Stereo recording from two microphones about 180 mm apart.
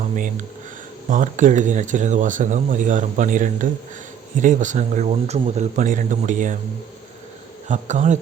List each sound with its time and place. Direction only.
1.1 s speech: 45° right (ahead or behind)
7.7 s a man's voice: 40° right (ahead or behind)